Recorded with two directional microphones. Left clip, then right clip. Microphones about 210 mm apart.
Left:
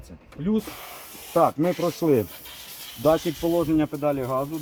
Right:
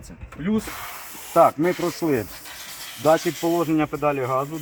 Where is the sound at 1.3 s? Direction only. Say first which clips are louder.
Right 4 dB; 50° left (ahead or behind).